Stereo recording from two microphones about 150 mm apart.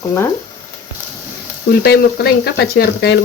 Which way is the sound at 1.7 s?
90° left.